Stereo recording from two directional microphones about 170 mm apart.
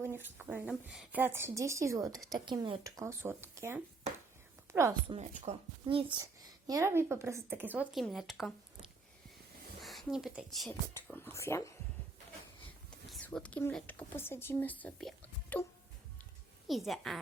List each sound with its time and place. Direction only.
0.0 s a woman's voice: 15° right (ahead or behind)
5.0 s a child's voice: 35° right (ahead or behind); by 10.8 s centre (ahead or behind)
10.9 s speech: 15° left (ahead or behind)
12.9 s speech: 5° left (ahead or behind)
16.6 s speech: centre (ahead or behind)